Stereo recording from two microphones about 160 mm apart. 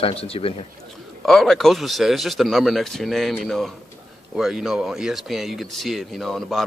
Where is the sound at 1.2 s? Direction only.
Centre (ahead or behind).